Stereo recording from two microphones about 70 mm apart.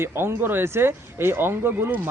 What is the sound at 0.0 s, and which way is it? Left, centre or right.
Speech, right.